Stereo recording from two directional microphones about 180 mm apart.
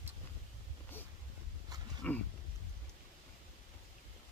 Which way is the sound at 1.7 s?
20° right (ahead or behind).